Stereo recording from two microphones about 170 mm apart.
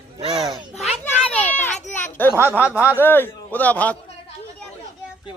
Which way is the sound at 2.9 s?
10° left (ahead or behind).